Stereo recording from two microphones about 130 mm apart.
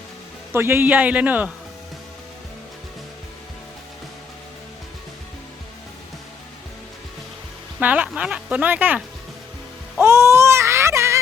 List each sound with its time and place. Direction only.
0.5 s speech: 20° right (ahead or behind)
7.8 s speech: 10° right (ahead or behind)
10.0 s baby cry: 20° right (ahead or behind)